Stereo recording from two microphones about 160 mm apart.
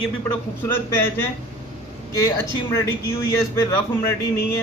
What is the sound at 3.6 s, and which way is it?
A man's voice, 15° left (ahead or behind).